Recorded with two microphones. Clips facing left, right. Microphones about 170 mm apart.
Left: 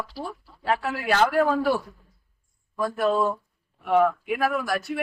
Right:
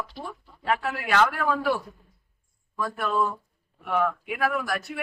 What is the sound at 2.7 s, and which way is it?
Speech, 35° left (ahead or behind).